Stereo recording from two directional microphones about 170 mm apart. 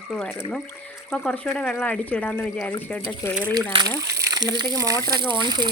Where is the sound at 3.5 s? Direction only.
25° right (ahead or behind).